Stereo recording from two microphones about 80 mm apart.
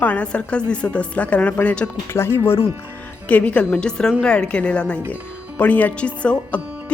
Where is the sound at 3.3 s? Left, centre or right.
Centre.